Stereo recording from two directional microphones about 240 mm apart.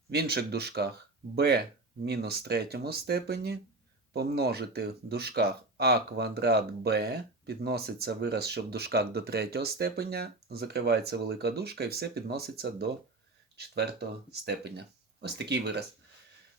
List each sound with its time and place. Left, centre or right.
0.1 s speech: right
14.3 s speech: right